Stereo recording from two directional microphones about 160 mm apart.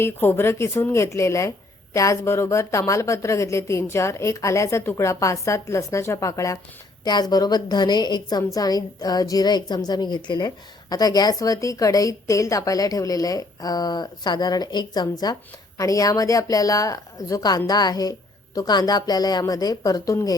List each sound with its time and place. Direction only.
0.0 s a woman's voice: 15° left (ahead or behind)